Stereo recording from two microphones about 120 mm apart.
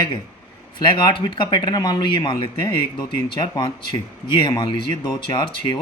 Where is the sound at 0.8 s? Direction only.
40° left (ahead or behind).